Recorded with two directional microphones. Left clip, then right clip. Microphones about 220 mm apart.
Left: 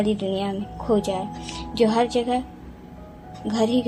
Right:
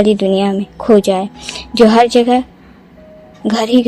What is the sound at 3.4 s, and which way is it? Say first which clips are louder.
Speech: right 9 dB; 50° right (ahead or behind).